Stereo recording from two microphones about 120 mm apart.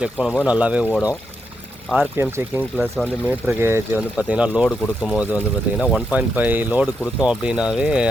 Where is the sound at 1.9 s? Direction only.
15° right (ahead or behind).